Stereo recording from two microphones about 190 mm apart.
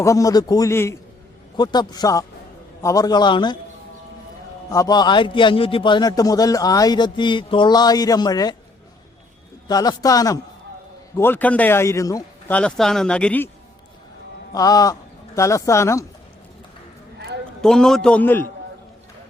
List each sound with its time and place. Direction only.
0.0 s a man's voice: 15° left (ahead or behind)
4.7 s a man's voice: 20° left (ahead or behind)
9.6 s a man's voice: 20° left (ahead or behind)
12.5 s speech: 5° left (ahead or behind)
14.5 s a man's voice: 20° left (ahead or behind)
17.2 s a sound: 60° right (ahead or behind)
17.6 s speech: 5° left (ahead or behind)